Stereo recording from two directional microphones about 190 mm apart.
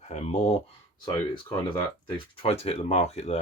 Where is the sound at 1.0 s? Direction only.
25° left (ahead or behind).